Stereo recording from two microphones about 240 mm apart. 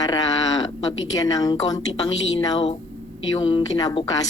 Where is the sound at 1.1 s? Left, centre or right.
Centre.